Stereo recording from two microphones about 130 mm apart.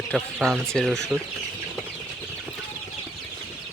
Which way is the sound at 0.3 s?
5° left (ahead or behind).